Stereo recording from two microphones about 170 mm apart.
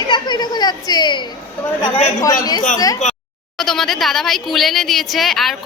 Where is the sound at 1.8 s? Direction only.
35° left (ahead or behind).